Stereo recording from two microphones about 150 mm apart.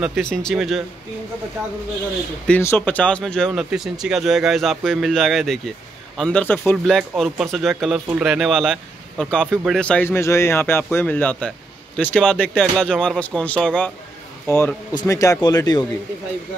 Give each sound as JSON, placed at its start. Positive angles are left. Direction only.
{"t": 0.0, "sound": "speech", "side_deg": 5}
{"t": 2.4, "sound": "speech", "side_deg": 10}
{"t": 3.5, "sound": "speech", "side_deg": -5}
{"t": 7.0, "sound": "speech", "side_deg": 0}